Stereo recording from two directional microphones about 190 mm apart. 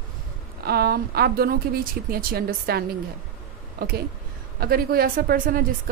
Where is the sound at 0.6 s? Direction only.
55° right (ahead or behind).